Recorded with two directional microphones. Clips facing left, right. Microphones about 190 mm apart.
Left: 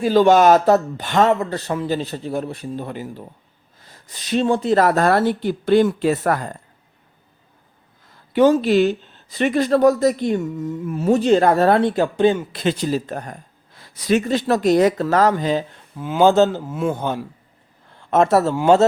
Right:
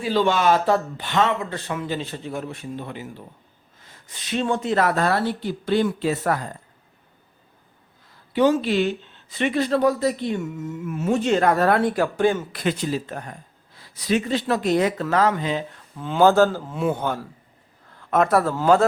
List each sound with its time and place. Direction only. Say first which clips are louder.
0.0 s speech: left 7 dB; 45° left (ahead or behind)
8.3 s speech: left 5 dB; 45° left (ahead or behind)
16.0 s speech: left 2 dB; 10° left (ahead or behind)
16.3 s speech: left 2 dB; 20° left (ahead or behind)
16.6 s a man's voice: left 1 dB; 5° left (ahead or behind)
17.0 s speech: left 2 dB; 15° left (ahead or behind)
17.9 s a sound: left 3 dB; 30° left (ahead or behind)